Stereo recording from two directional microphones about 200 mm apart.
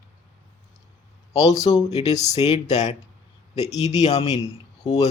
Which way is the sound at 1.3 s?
30° left (ahead or behind).